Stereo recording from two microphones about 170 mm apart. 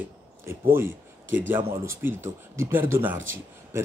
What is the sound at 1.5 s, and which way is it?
Speech, 15° right (ahead or behind).